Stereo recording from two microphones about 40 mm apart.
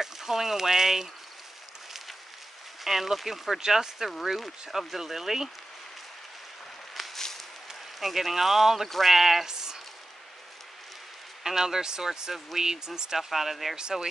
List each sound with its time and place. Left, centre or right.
0.0 s speech: centre
2.8 s speech: centre
4.2 s speech: centre
7.0 s a sound: centre
8.0 s speech: centre
8.8 s speech: centre
9.1 s speech: centre
11.4 s speech: centre
13.7 s speech: centre